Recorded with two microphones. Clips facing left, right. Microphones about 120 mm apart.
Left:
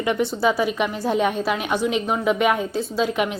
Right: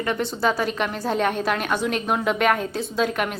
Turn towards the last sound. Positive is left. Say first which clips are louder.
# left 2 dB
turn(degrees=5)  # may be behind; listen again after turning